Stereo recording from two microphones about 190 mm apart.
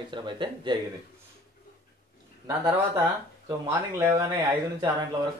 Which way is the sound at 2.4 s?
15° right (ahead or behind).